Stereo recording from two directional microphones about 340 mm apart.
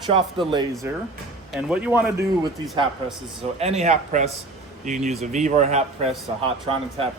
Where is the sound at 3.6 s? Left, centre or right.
Centre.